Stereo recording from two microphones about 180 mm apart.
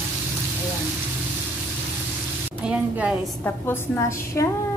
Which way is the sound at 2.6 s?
5° right (ahead or behind).